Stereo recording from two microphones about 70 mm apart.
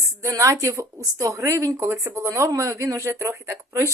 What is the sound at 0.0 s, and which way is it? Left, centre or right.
A woman's voice, right.